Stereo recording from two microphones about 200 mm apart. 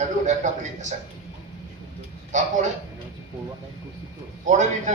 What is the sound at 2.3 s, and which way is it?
Speech, 35° right (ahead or behind).